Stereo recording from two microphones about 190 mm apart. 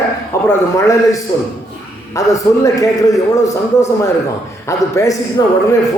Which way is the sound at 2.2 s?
15° left (ahead or behind).